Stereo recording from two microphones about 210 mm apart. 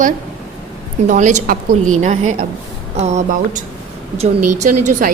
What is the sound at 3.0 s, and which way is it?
A woman's voice, 30° right (ahead or behind).